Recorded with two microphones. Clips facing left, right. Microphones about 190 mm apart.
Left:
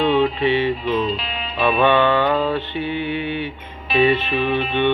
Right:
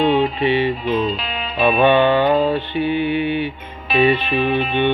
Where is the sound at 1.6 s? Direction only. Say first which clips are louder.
Right 2 dB; 10° right (ahead or behind).